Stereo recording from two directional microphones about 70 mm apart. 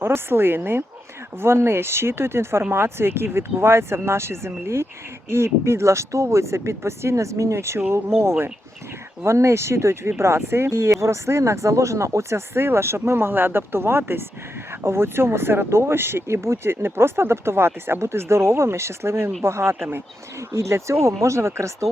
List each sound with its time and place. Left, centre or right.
0.0 s speech: right